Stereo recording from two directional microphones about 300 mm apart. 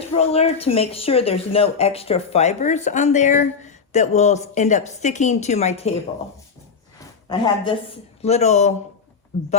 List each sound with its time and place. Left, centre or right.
0.2 s speech: left
7.3 s speech: centre